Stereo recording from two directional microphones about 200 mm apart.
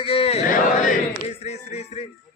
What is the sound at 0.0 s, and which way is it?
Battle cry, 30° left (ahead or behind).